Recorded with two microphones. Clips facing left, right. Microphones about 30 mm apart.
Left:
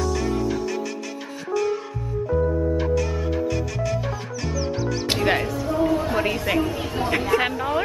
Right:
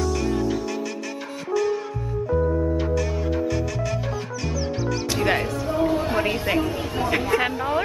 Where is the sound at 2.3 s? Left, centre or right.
Centre.